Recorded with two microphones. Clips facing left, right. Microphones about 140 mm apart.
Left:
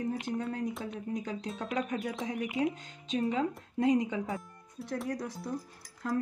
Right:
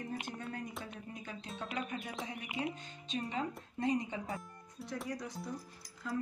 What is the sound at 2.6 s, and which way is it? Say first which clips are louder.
Speech: left 8 dB; 90° left.